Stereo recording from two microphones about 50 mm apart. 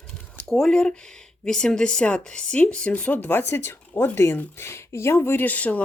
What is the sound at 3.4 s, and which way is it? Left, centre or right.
Speech, left.